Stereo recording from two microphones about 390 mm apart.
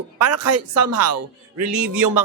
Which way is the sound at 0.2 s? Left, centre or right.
Right.